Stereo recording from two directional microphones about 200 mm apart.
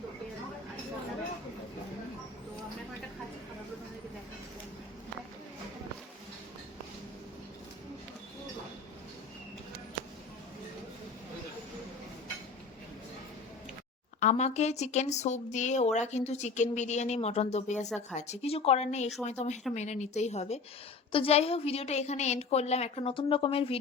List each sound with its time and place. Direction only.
14.2 s speech: 35° left (ahead or behind)